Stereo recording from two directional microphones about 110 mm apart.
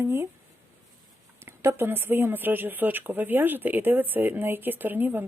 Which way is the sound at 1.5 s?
20° right (ahead or behind).